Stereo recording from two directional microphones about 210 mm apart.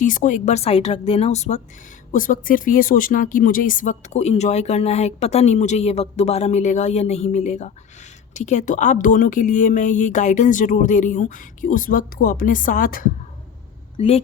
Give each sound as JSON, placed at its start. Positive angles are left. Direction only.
{"t": 0.0, "sound": "speech", "side_deg": 40}
{"t": 13.9, "sound": "speech", "side_deg": 25}